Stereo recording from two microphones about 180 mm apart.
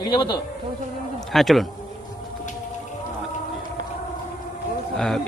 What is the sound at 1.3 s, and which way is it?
Speech, centre (ahead or behind).